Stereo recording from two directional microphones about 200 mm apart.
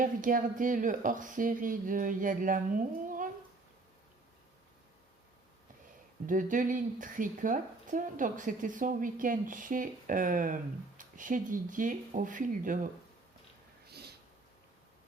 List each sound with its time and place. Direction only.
0.0 s speech: 40° right (ahead or behind)
6.2 s speech: 40° right (ahead or behind)
13.8 s a sound: 55° right (ahead or behind)